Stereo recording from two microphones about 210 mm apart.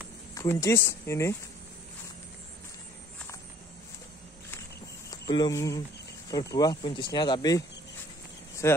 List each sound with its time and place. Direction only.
0.3 s speech: 15° left (ahead or behind)
5.3 s speech: 15° left (ahead or behind)
8.6 s speech: 10° left (ahead or behind)